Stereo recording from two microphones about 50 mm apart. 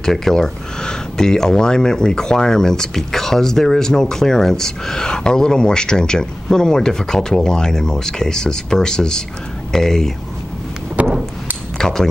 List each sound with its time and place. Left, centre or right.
0.0 s speech: centre
11.0 s a sound: right
11.8 s speech: centre